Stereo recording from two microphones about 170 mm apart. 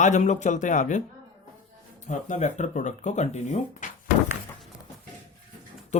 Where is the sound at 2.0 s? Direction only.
45° left (ahead or behind).